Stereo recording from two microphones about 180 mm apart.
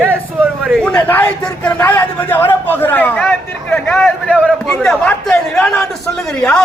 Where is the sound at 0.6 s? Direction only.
5° left (ahead or behind).